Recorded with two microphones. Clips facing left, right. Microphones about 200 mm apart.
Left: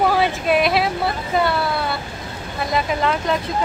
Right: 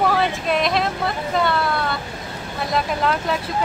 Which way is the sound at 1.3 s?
5° left (ahead or behind).